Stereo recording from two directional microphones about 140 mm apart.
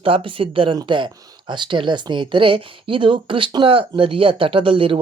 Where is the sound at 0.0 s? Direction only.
40° right (ahead or behind).